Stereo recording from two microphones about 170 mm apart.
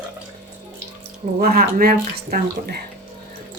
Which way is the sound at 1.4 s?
65° right (ahead or behind).